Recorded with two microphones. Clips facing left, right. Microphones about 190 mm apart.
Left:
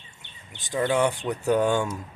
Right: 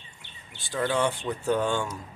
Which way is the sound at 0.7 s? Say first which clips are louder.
Left 3 dB; 20° left (ahead or behind).